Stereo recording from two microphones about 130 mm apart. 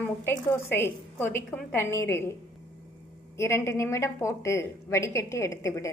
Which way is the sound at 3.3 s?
20° left (ahead or behind).